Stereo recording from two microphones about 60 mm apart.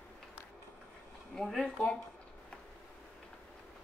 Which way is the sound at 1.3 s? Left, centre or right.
Centre.